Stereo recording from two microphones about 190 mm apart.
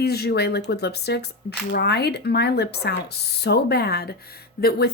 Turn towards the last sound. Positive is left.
turn(degrees=55)  # may be behind; listen again after turning